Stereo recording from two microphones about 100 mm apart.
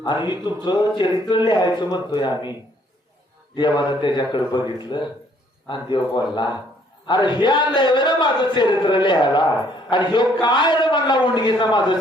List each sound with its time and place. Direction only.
0.0 s speech: 50° left (ahead or behind)